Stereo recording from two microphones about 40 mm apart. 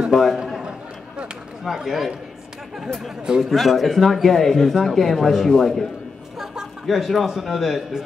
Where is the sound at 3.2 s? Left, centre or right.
Centre.